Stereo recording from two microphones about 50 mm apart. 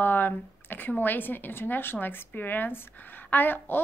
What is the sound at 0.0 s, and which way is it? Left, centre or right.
A woman's voice, left.